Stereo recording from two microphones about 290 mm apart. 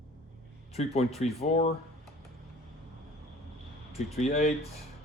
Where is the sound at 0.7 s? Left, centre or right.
Left.